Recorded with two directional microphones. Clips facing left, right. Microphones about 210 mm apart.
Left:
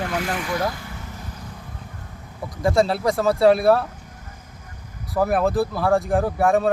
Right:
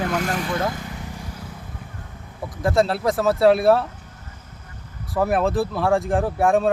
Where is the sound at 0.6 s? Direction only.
20° right (ahead or behind).